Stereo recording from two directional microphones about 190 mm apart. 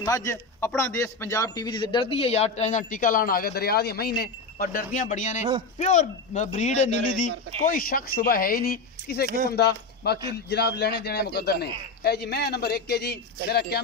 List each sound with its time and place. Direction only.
0.0 s a man's voice: 15° left (ahead or behind); by 13.7 s 60° left (ahead or behind)